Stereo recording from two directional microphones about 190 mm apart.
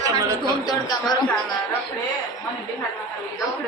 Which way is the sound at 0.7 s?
20° left (ahead or behind).